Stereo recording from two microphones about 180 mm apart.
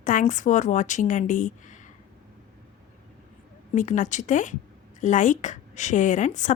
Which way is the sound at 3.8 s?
45° left (ahead or behind).